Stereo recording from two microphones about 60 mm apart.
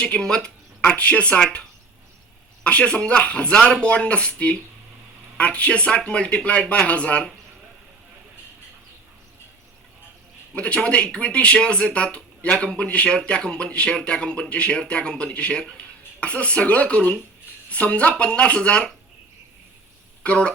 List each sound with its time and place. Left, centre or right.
0.0 s speech: centre
2.6 s speech: centre
10.5 s speech: left
20.2 s speech: left